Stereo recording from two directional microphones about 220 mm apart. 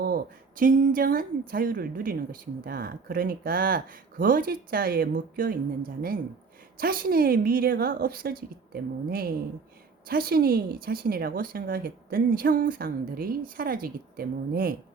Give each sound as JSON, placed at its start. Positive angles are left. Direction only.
{"t": 0.0, "sound": "a woman's voice", "side_deg": -40}
{"t": 6.7, "sound": "a woman's voice", "side_deg": -40}